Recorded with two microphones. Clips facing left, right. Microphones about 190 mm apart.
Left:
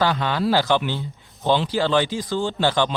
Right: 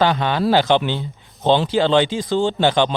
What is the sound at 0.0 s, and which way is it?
Speech, 20° right (ahead or behind).